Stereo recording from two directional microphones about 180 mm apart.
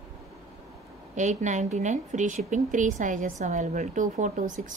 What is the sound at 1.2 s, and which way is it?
A woman's voice, 40° right (ahead or behind).